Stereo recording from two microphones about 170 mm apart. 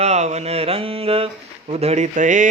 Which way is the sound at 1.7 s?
40° right (ahead or behind).